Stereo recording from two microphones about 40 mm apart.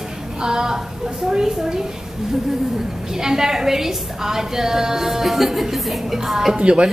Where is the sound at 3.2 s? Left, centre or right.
Centre.